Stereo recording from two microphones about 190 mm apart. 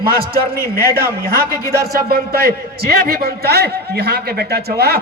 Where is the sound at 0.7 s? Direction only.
50° right (ahead or behind).